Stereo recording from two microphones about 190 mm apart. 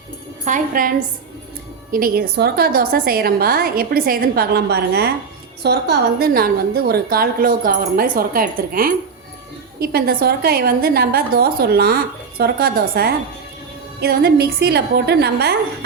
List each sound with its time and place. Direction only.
0.4 s a woman's voice: 45° right (ahead or behind); by 15.5 s 60° right (ahead or behind)